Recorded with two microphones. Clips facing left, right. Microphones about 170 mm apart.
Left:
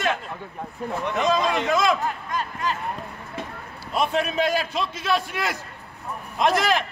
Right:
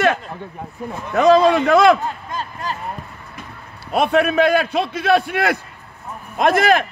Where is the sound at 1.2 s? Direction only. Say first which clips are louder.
Right 11 dB; 65° right (ahead or behind).